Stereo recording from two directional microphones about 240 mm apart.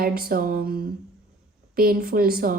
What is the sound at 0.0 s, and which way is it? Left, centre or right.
Speech, right.